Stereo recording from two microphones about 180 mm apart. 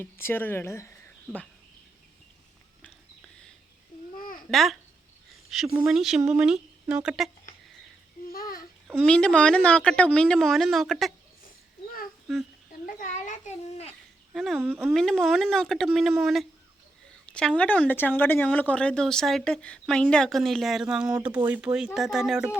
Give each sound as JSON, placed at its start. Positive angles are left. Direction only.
{"t": 0.0, "sound": "speech", "side_deg": 10}
{"t": 4.2, "sound": "babbling", "side_deg": 50}
{"t": 4.5, "sound": "a woman's voice", "side_deg": 0}
{"t": 8.3, "sound": "babbling", "side_deg": 55}
{"t": 9.0, "sound": "a woman's voice", "side_deg": 5}
{"t": 12.8, "sound": "a sound", "side_deg": 45}
{"t": 14.3, "sound": "a woman's voice", "side_deg": 0}
{"t": 14.6, "sound": "speech", "side_deg": -10}
{"t": 14.9, "sound": "a woman's voice", "side_deg": 0}
{"t": 17.2, "sound": "a sound", "side_deg": 5}
{"t": 17.6, "sound": "a woman's voice", "side_deg": 10}